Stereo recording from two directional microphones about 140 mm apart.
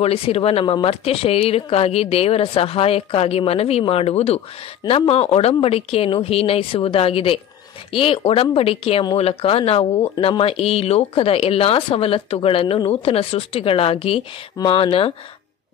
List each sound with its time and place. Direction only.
0.0 s speech: 45° left (ahead or behind)